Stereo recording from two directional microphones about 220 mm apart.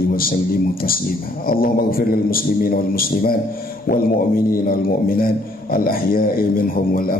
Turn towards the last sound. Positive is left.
turn(degrees=40)  # may be behind; listen again after turning